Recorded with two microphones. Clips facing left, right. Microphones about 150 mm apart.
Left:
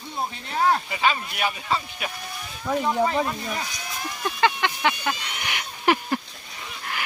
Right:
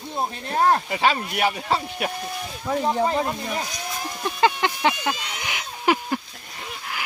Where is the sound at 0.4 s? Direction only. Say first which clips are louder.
Right 2 dB; 45° right (ahead or behind).